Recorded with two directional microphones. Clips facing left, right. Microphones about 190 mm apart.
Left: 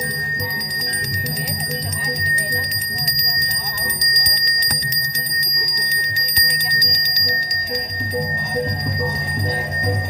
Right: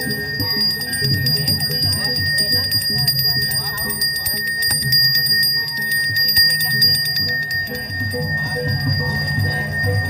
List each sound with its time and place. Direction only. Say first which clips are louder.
2.3 s music: right 1 dB; 5° left (ahead or behind); by 5.2 s 10° right (ahead or behind)
6.1 s music: even; 45° right (ahead or behind)